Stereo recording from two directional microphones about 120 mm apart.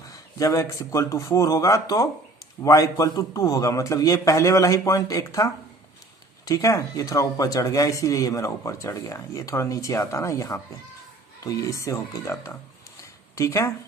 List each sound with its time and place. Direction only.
0.1 s speech: 30° left (ahead or behind)